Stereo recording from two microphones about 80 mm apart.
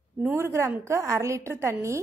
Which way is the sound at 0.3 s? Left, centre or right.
Right.